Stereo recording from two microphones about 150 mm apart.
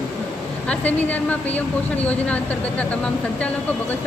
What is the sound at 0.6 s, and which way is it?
Speech, 10° left (ahead or behind).